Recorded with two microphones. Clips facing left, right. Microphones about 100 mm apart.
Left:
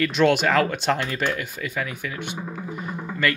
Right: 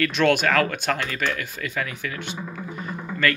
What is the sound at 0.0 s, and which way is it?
Speech, 15° left (ahead or behind).